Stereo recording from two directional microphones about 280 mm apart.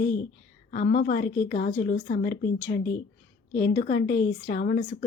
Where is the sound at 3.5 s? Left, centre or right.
Left.